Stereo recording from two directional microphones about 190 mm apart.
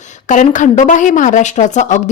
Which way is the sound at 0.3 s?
40° left (ahead or behind).